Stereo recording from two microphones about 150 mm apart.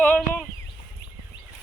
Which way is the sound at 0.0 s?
10° left (ahead or behind).